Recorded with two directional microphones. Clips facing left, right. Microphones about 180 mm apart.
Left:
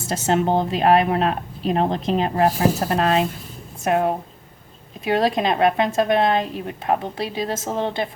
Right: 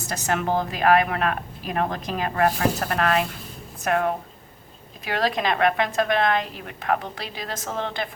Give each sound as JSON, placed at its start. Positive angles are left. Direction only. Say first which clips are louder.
{"t": 0.0, "sound": "speech", "louder": "left 5 dB", "side_deg": 25}